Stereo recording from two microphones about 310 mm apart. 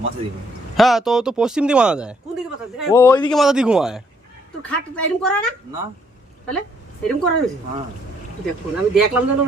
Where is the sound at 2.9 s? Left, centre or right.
Centre.